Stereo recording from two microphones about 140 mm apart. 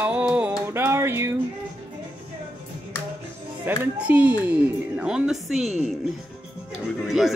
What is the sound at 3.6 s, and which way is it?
Speech, 10° right (ahead or behind).